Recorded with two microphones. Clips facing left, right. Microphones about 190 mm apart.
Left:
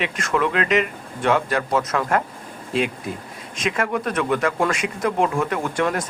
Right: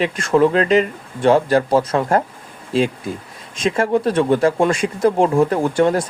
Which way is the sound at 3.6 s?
30° right (ahead or behind).